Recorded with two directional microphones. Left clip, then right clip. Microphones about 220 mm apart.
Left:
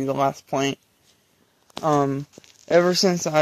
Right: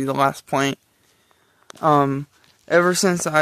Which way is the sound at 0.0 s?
30° right (ahead or behind).